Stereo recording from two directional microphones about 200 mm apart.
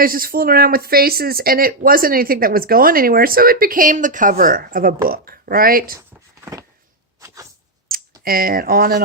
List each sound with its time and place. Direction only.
0.0 s speech: 45° right (ahead or behind)
6.4 s a sound: 15° right (ahead or behind)
8.2 s speech: 45° right (ahead or behind)